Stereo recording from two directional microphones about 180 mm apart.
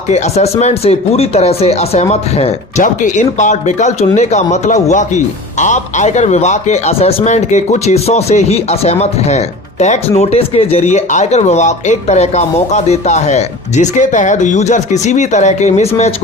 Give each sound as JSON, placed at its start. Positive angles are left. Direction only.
{"t": 0.1, "sound": "speech", "side_deg": 35}